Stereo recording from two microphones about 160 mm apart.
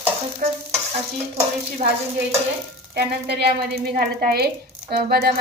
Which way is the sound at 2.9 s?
85° right.